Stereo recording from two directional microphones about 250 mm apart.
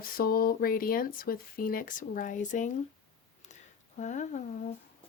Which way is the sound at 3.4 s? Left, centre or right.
Left.